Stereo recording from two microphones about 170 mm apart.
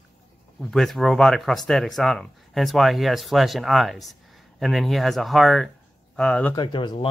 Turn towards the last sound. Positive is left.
turn(degrees=25)  # may be behind; listen again after turning